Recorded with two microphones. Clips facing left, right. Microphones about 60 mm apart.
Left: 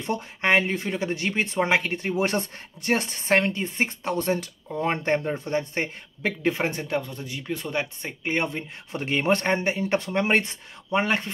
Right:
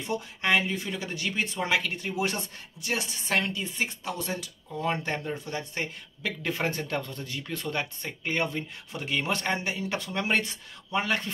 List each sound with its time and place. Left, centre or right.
0.0 s speech: left
6.5 s speech: centre
8.9 s speech: left